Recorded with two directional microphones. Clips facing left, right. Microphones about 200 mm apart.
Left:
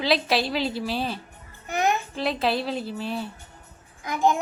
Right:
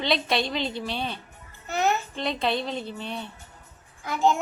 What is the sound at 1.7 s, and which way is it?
Babbling, 15° left (ahead or behind).